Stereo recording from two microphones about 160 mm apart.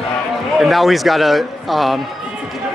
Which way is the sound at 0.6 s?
Centre (ahead or behind).